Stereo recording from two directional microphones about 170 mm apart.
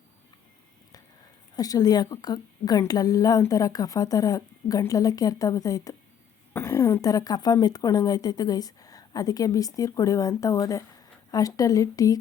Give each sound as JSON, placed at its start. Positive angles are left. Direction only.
{"t": 1.5, "sound": "a woman's voice", "side_deg": 20}